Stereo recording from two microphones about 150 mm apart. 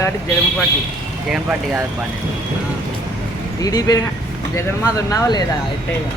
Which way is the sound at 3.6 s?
25° left (ahead or behind).